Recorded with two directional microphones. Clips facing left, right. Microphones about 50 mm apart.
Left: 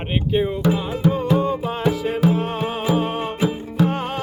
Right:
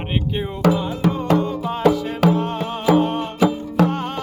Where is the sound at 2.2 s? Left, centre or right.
Right.